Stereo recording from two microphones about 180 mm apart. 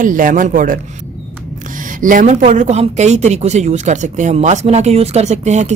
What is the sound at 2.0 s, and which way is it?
Speech, 50° right (ahead or behind).